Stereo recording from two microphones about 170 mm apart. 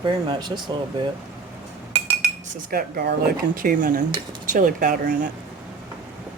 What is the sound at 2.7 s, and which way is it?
Speech, 60° right (ahead or behind).